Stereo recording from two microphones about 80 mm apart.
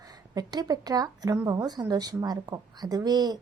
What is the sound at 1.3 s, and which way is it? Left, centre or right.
A woman's voice, right.